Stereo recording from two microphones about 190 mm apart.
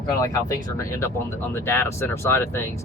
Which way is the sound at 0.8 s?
15° left (ahead or behind).